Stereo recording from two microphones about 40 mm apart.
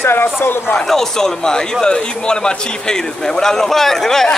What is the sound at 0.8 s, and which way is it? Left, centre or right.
Speech, centre.